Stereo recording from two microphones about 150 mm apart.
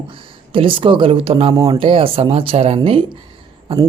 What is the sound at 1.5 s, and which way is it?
Speech, 30° right (ahead or behind).